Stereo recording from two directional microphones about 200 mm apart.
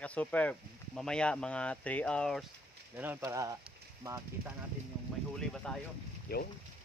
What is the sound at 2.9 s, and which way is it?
Speech, 10° right (ahead or behind).